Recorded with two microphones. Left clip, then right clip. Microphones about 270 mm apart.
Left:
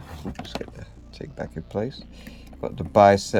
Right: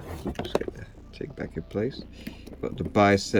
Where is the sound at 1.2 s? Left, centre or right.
Left.